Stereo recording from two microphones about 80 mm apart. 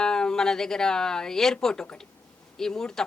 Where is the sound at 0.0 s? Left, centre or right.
Centre.